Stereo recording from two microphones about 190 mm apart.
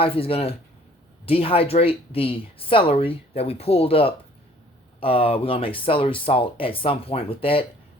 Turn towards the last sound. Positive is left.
turn(degrees=30)  # may be behind; listen again after turning